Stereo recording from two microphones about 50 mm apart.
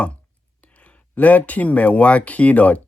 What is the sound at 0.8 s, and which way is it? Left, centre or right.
Speech, left.